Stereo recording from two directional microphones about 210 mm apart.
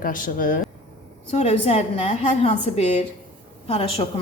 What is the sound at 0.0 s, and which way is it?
Speech, 40° left (ahead or behind).